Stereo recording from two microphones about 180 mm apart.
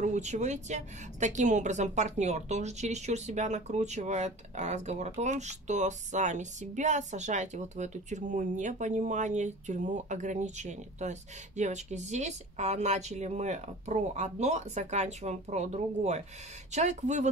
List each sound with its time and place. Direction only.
0.0 s a woman's voice: 40° right (ahead or behind)